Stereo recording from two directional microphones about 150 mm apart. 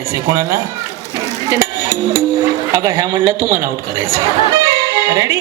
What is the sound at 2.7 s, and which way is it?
Speech, 25° right (ahead or behind).